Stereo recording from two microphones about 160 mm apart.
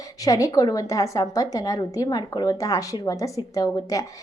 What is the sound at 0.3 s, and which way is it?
A woman's voice, 20° left (ahead or behind).